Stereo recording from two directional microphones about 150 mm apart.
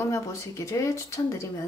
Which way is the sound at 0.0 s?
20° left (ahead or behind).